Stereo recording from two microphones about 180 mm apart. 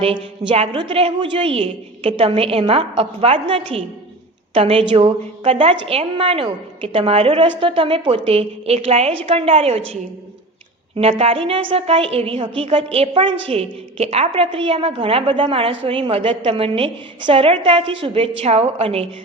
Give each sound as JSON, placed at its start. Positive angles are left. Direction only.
{"t": 0.0, "sound": "a woman's voice", "side_deg": -30}
{"t": 10.9, "sound": "a woman's voice", "side_deg": -30}